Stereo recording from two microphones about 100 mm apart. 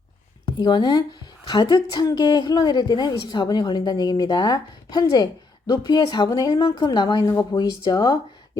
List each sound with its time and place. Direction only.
0.4 s a woman's voice: 45° left (ahead or behind)
6.5 s a woman's voice: 60° left (ahead or behind)
7.3 s speech: 35° left (ahead or behind)